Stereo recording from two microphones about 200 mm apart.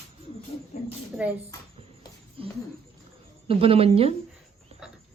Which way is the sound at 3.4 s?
30° right (ahead or behind).